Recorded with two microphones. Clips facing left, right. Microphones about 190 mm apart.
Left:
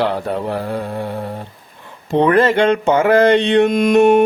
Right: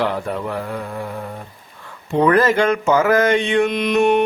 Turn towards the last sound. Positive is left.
turn(degrees=45)  # may be behind; listen again after turning